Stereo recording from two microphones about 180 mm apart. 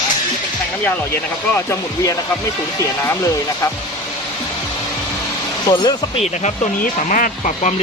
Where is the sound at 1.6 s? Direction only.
20° left (ahead or behind).